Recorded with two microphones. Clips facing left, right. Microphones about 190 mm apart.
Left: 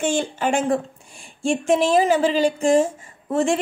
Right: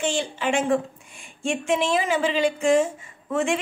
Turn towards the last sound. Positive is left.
turn(degrees=40)  # may be behind; listen again after turning